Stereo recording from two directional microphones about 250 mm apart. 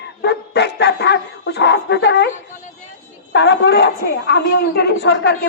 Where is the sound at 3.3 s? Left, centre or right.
Left.